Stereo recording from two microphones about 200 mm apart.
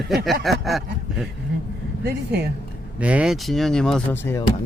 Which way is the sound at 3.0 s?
5° right (ahead or behind).